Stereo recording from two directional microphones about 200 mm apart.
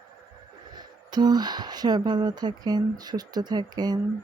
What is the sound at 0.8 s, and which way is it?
Speech, 20° right (ahead or behind).